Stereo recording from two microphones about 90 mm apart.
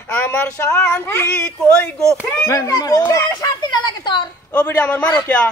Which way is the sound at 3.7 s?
55° left (ahead or behind).